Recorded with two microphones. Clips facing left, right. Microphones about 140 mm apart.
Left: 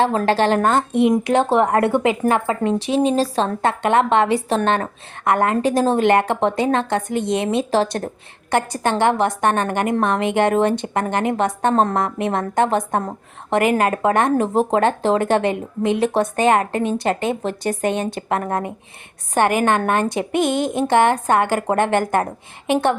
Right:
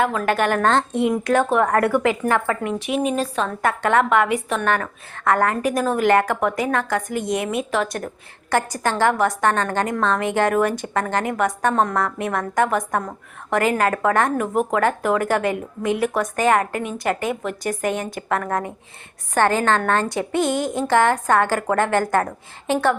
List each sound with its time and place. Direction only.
0.0 s a woman's voice: 30° left (ahead or behind)
0.6 s a woman's voice: 10° left (ahead or behind)
1.3 s a woman's voice: 30° left (ahead or behind)
2.6 s a woman's voice: 30° left (ahead or behind)